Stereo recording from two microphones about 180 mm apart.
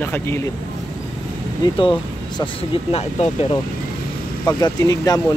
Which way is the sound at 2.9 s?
35° left (ahead or behind).